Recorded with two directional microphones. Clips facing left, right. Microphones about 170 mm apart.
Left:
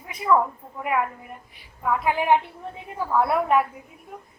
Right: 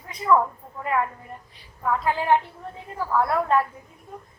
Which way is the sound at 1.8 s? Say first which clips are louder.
Left 1 dB; 10° left (ahead or behind).